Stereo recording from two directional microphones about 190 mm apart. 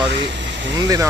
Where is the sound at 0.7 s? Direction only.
20° right (ahead or behind).